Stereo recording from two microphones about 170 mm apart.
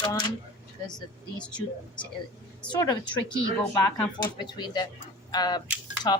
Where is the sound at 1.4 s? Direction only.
5° left (ahead or behind).